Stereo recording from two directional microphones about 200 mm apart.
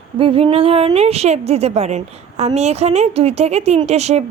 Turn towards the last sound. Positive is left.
turn(degrees=-30)  # may be behind; listen again after turning